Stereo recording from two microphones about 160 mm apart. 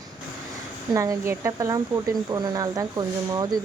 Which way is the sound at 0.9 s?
20° right (ahead or behind).